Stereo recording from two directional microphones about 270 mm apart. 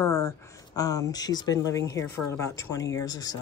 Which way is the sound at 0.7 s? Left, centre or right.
Centre.